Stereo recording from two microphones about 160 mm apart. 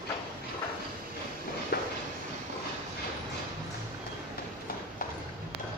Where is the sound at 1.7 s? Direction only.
90° left.